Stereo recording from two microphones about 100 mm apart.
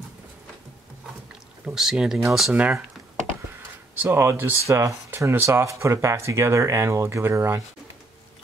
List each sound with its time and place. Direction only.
1.7 s speech: 5° right (ahead or behind)
3.5 s a sound: 20° right (ahead or behind)
4.6 s speech: 30° right (ahead or behind)